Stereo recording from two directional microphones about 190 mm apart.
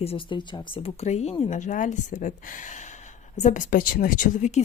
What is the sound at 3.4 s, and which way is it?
Speech, 40° left (ahead or behind).